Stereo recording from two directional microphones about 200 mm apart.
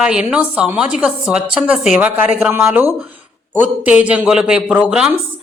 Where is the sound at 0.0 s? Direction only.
5° right (ahead or behind).